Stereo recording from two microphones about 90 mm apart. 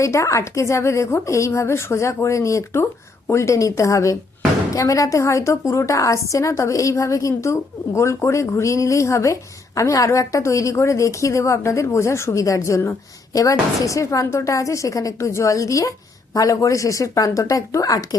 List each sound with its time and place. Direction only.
0.0 s a woman's voice: 35° left (ahead or behind)